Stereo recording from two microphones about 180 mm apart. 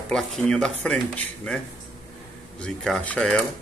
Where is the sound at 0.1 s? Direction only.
5° left (ahead or behind).